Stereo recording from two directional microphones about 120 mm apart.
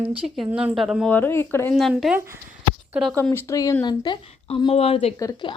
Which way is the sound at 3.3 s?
25° left (ahead or behind).